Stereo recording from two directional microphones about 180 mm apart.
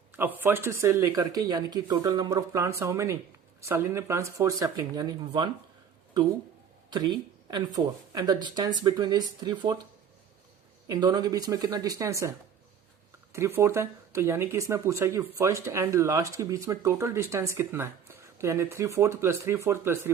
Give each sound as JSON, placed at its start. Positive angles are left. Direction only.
{"t": 0.1, "sound": "speech", "side_deg": -10}
{"t": 7.5, "sound": "speech", "side_deg": -20}
{"t": 10.8, "sound": "speech", "side_deg": -25}
{"t": 13.3, "sound": "speech", "side_deg": -15}